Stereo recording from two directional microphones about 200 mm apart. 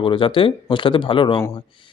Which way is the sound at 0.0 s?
25° left (ahead or behind).